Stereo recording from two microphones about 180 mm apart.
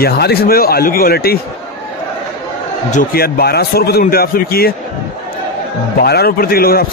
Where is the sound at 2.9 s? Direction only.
50° left (ahead or behind).